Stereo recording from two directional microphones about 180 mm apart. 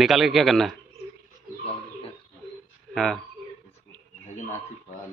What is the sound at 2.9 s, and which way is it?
Speech, 5° left (ahead or behind).